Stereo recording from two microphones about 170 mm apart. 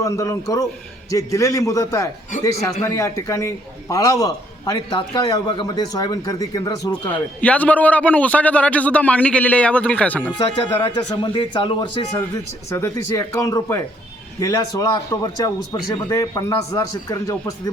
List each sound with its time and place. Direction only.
0.0 s a man's voice: 20° left (ahead or behind)
4.9 s a man's voice: 30° left (ahead or behind)
6.9 s a man's voice: 10° left (ahead or behind)
10.3 s a man's voice: 30° left (ahead or behind)
12.7 s a man's voice: 15° left (ahead or behind)